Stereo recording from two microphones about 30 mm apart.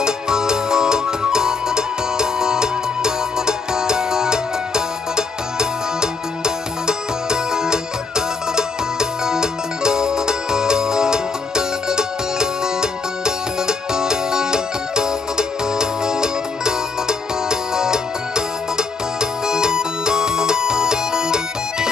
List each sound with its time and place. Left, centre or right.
0.0 s music: right
9.2 s music: right